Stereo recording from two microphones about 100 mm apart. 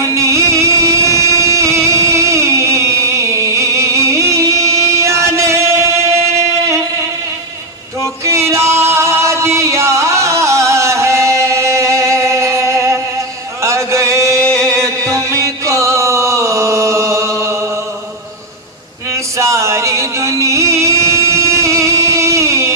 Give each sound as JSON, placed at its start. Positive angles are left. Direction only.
{"t": 0.0, "sound": "music", "side_deg": -30}
{"t": 8.0, "sound": "music", "side_deg": -30}
{"t": 13.6, "sound": "chant", "side_deg": -30}
{"t": 19.3, "sound": "music", "side_deg": -30}